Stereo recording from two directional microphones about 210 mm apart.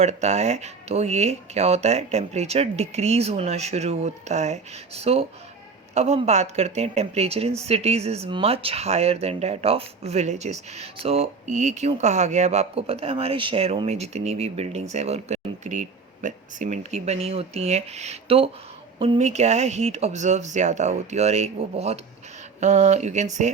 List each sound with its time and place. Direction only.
0.0 s speech: 30° right (ahead or behind)